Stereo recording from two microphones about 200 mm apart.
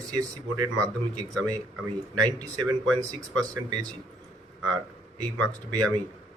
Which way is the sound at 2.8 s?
5° left (ahead or behind).